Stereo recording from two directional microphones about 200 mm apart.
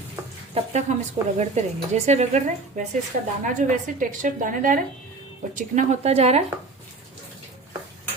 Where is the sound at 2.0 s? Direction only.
35° right (ahead or behind).